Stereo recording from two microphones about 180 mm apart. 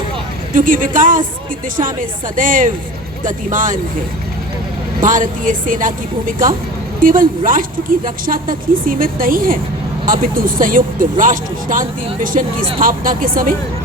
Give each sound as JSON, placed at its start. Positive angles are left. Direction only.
{"t": 0.5, "sound": "speech", "side_deg": -50}
{"t": 4.9, "sound": "speech", "side_deg": -50}